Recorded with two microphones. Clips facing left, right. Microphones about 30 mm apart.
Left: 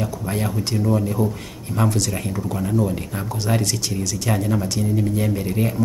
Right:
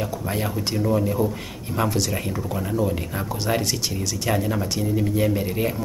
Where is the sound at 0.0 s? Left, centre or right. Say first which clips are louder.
Left 1 dB; centre.